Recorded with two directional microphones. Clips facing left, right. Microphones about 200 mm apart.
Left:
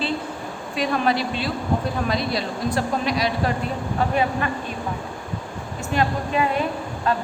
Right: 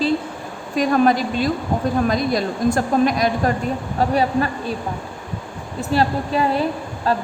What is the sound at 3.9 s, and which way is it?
Speech, 35° right (ahead or behind).